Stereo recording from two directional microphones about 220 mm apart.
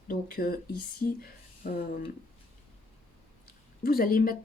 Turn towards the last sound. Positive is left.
turn(degrees=40)  # may be behind; listen again after turning